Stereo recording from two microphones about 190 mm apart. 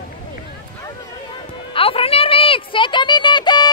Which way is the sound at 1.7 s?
30° left (ahead or behind).